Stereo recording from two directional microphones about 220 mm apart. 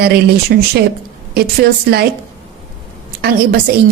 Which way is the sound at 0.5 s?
50° right (ahead or behind).